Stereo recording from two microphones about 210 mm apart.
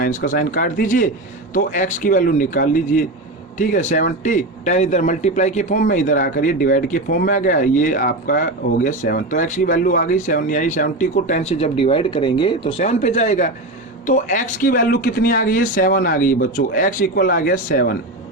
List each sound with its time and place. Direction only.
0.0 s a man's voice: 40° left (ahead or behind)